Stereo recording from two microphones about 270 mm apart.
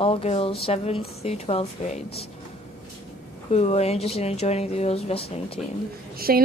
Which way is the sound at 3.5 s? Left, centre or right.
Left.